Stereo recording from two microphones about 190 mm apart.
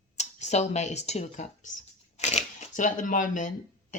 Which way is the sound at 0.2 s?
35° left (ahead or behind).